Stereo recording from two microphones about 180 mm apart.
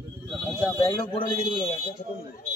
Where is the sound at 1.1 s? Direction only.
30° left (ahead or behind).